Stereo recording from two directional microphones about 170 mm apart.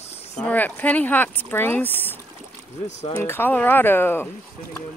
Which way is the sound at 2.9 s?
40° left (ahead or behind).